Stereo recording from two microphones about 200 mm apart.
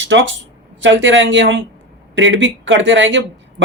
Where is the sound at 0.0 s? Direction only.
65° right (ahead or behind).